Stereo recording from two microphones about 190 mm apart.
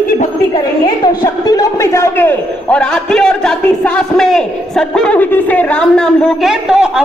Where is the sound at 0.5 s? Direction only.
20° left (ahead or behind).